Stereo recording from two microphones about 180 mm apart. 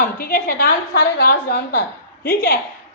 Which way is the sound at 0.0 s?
50° left (ahead or behind).